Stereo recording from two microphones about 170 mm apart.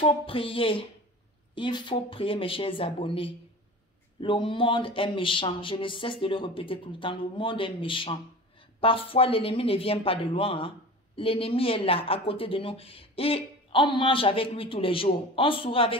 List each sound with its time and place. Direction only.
0.0 s a woman's voice: 30° left (ahead or behind)